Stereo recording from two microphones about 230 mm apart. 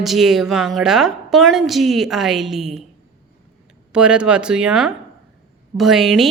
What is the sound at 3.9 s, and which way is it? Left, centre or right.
A woman's voice, centre.